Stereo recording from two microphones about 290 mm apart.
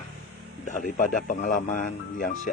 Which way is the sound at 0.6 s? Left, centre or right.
Left.